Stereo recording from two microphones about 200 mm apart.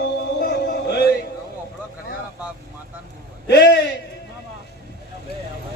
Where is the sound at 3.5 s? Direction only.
60° left (ahead or behind).